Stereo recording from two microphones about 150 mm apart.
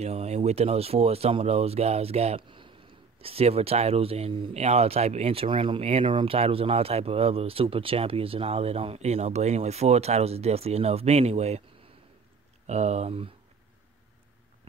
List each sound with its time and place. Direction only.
0.0 s speech: 45° right (ahead or behind)
12.6 s speech: 45° right (ahead or behind)